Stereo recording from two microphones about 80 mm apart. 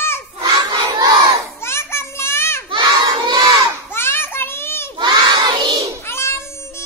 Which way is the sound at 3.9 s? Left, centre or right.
Left.